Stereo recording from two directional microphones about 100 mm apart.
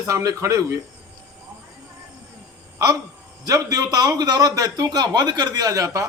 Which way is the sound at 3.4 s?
35° right (ahead or behind).